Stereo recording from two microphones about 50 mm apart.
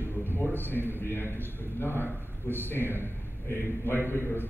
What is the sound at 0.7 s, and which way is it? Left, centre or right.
A man's voice, left.